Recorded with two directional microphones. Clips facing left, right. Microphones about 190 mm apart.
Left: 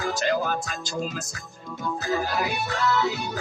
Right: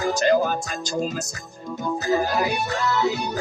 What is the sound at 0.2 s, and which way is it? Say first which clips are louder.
Music: right 6 dB; 45° right (ahead or behind).